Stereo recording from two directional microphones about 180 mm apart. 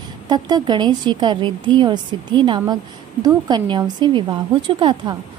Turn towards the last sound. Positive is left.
turn(degrees=-25)  # may be behind; listen again after turning